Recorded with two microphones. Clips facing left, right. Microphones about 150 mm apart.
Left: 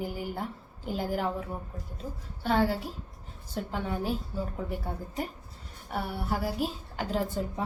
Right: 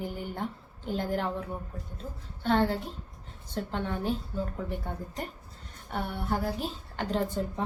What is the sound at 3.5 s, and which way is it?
A woman's voice, 5° left (ahead or behind).